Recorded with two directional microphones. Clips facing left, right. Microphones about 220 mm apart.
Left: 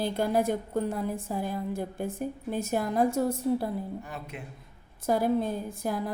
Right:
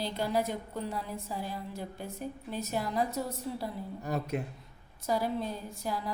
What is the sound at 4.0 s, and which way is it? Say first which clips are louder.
Speech: right 7 dB; 40° right (ahead or behind).